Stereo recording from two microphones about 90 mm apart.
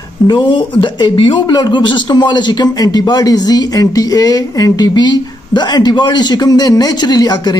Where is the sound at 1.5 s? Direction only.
55° left (ahead or behind).